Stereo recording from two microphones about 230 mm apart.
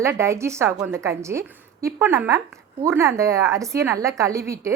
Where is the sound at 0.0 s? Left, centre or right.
Centre.